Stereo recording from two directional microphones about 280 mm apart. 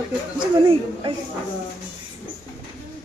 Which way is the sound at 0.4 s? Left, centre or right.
Centre.